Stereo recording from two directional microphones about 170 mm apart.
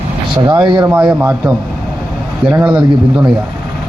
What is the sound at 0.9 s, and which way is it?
Speech, 5° right (ahead or behind).